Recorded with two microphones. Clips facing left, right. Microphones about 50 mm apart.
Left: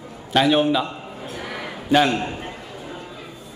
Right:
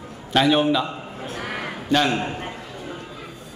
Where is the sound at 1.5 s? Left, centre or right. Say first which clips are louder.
Right 2 dB; right.